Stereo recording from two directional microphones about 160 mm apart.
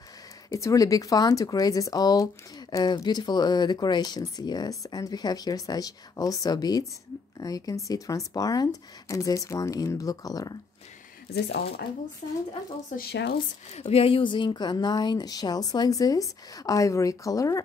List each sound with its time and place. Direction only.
0.5 s speech: 20° left (ahead or behind)
11.3 s speech: 90° left
12.2 s speech: 50° left (ahead or behind)
12.9 s speech: 80° left
13.7 s speech: 40° left (ahead or behind); by 17.6 s 20° left (ahead or behind)